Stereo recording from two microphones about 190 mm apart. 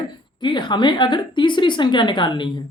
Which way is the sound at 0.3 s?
25° left (ahead or behind).